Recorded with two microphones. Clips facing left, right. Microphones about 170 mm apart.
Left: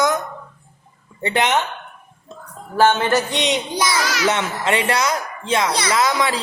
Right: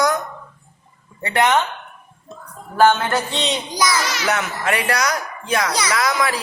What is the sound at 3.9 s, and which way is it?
Speech, centre (ahead or behind).